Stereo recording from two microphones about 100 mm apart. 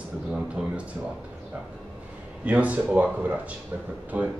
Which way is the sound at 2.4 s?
15° right (ahead or behind).